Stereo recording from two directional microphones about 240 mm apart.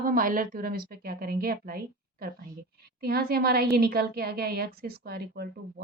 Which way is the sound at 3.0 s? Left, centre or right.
Right.